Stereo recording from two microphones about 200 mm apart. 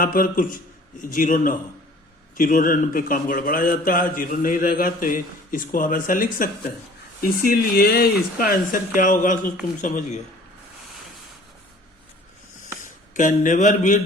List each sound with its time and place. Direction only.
0.0 s a man's voice: 45° left (ahead or behind)
12.8 s speech: 40° left (ahead or behind)